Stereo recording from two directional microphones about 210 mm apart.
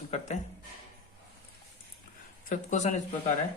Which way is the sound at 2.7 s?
35° left (ahead or behind).